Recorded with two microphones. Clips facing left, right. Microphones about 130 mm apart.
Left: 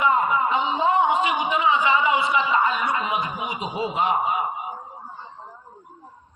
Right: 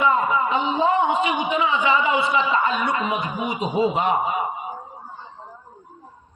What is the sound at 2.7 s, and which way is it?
A man's voice, 55° right (ahead or behind).